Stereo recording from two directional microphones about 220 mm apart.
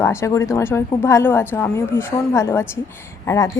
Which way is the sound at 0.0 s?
15° left (ahead or behind).